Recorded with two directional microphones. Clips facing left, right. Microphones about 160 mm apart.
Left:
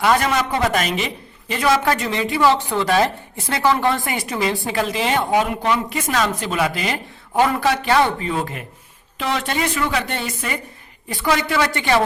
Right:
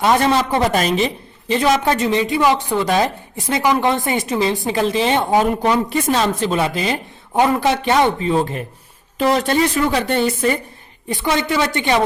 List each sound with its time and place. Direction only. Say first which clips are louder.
0.0 s a woman's voice: right 3 dB; 25° right (ahead or behind)
5.3 s a woman's voice: right 3 dB; 40° right (ahead or behind)
11.1 s a woman's voice: right 1 dB; 20° right (ahead or behind)